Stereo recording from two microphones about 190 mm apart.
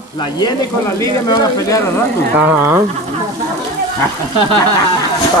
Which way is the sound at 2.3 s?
10° right (ahead or behind).